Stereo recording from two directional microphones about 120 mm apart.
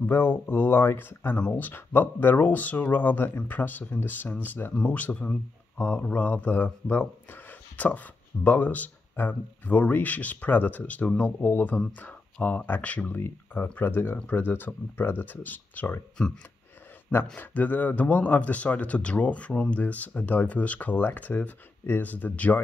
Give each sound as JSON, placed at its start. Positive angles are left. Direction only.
{"t": 0.0, "sound": "speech", "side_deg": 20}
{"t": 7.7, "sound": "a sound", "side_deg": 15}
{"t": 8.5, "sound": "speech", "side_deg": 15}
{"t": 17.4, "sound": "speech", "side_deg": 15}